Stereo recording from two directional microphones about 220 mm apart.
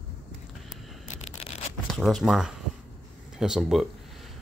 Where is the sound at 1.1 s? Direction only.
30° left (ahead or behind).